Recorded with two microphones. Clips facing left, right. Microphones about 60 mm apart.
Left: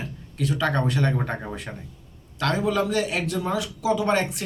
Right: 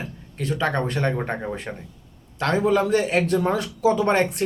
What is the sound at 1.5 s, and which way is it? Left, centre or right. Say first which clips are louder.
A man's voice: right 3 dB; right.